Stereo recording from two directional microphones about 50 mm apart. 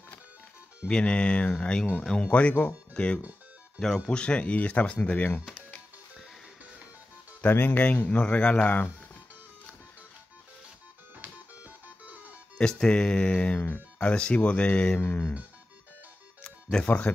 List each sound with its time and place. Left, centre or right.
0.8 s speech: left
2.2 s speech: left
2.9 s music: left
3.8 s speech: centre; by 5.3 s left
7.4 s speech: left
7.7 s speech: left
8.2 s speech: left
11.6 s music: right
12.5 s speech: centre
13.6 s speech: left
14.0 s speech: left
15.0 s speech: left
16.7 s speech: left